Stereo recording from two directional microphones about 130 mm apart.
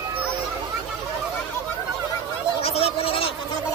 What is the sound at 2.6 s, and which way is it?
Gargling, 50° left (ahead or behind).